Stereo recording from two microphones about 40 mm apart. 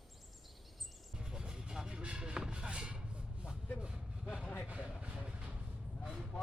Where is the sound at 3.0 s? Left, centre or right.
Right.